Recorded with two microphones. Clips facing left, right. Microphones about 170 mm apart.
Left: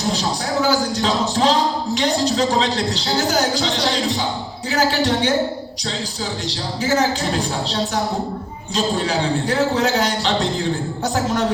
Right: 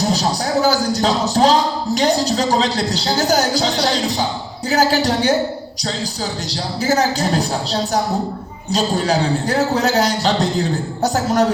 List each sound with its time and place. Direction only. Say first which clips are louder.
0.1 s a woman's voice: right 3 dB; 40° right (ahead or behind)
6.5 s a woman's voice: right 2 dB; 40° right (ahead or behind)